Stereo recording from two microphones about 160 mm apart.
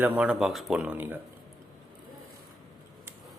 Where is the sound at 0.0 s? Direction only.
10° right (ahead or behind).